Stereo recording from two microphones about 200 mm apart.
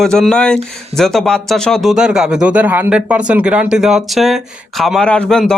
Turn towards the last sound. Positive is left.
turn(degrees=5)  # may be behind; listen again after turning